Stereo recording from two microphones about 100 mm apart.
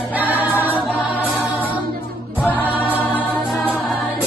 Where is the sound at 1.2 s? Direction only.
15° left (ahead or behind).